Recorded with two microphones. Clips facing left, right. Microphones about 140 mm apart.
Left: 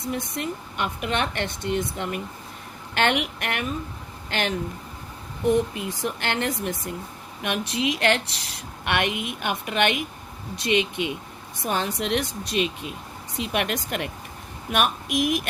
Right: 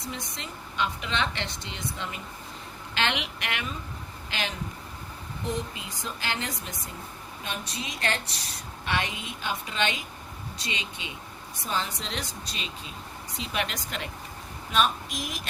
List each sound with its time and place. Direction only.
0.1 s a woman's voice: 55° left (ahead or behind)
5.5 s a woman's voice: 65° left (ahead or behind)